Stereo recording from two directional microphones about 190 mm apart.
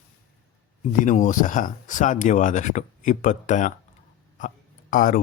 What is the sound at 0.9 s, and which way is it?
Speech, 45° left (ahead or behind).